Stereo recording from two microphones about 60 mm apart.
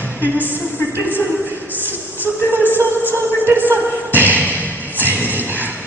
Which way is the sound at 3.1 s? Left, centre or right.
Right.